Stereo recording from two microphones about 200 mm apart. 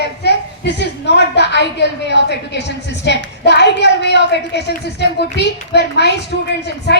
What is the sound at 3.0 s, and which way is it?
A woman's voice, 60° left (ahead or behind).